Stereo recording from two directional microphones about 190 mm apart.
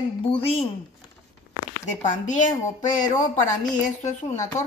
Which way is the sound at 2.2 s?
40° left (ahead or behind).